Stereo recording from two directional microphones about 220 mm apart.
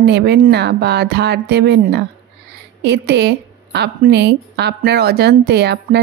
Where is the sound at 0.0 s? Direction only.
50° right (ahead or behind).